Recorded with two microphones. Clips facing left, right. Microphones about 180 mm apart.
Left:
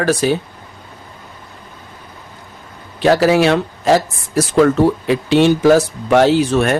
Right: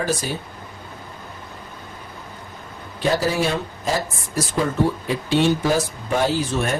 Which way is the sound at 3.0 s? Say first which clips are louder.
Left 9 dB; 80° left.